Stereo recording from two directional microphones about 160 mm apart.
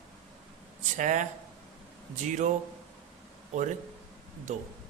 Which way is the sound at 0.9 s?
50° right (ahead or behind).